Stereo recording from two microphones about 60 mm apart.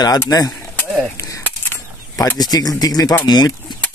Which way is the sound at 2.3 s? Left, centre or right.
Left.